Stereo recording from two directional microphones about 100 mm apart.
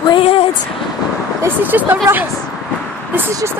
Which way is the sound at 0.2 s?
75° left (ahead or behind).